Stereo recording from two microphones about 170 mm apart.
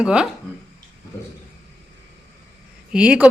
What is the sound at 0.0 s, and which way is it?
Speech, 5° right (ahead or behind).